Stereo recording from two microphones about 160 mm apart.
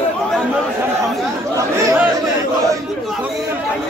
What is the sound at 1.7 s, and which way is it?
Chatter, 15° right (ahead or behind).